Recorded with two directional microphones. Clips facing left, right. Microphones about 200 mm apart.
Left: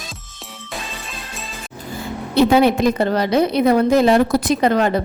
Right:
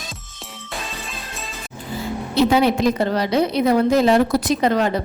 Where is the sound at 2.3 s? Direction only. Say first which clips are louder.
Left 3 dB; 55° left (ahead or behind).